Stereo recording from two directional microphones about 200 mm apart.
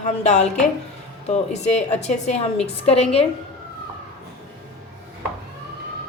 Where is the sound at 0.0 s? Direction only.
35° left (ahead or behind).